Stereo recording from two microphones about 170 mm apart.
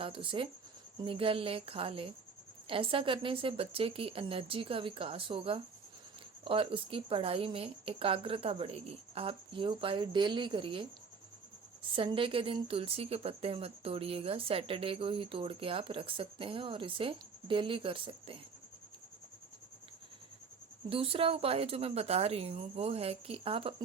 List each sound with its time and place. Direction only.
0.0 s speech: 30° right (ahead or behind)
11.9 s speech: 30° right (ahead or behind)
20.9 s speech: 35° right (ahead or behind)